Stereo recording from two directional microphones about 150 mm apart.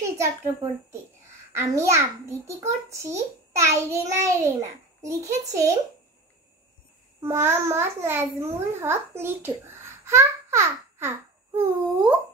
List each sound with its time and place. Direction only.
0.2 s a child's voice: 15° right (ahead or behind)
7.2 s a child's voice: 15° right (ahead or behind)